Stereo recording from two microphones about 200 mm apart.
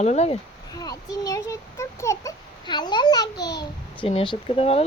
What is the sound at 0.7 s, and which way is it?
A child's voice, 20° left (ahead or behind).